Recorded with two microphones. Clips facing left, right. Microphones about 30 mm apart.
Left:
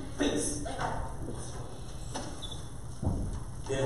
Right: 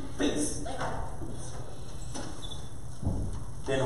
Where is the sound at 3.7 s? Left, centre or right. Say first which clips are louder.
Right 3 dB; right.